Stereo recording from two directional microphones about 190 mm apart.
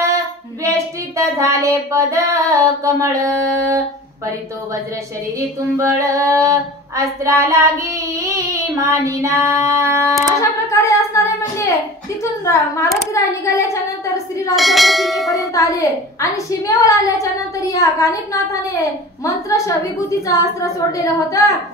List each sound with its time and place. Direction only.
1.1 s child singing: 15° right (ahead or behind)
5.8 s child singing: 15° right (ahead or behind)
9.0 s child singing: 15° right (ahead or behind)
10.2 s a sound: 15° left (ahead or behind)
12.2 s a woman's voice: 15° left (ahead or behind)
14.5 s church bell: centre (ahead or behind)
15.3 s a woman's voice: 15° left (ahead or behind)